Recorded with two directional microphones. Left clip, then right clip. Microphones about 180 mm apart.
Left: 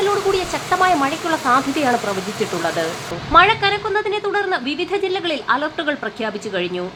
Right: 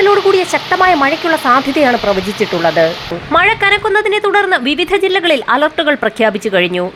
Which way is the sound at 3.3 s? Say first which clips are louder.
Right 3 dB; 25° right (ahead or behind).